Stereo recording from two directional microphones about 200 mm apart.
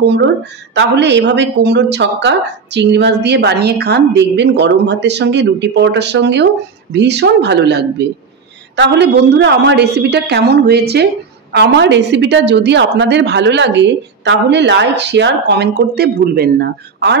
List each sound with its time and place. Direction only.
0.0 s a woman's voice: 60° right (ahead or behind)